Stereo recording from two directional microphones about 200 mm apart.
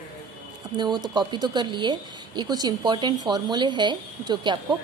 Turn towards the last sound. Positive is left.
turn(degrees=-20)  # may be behind; listen again after turning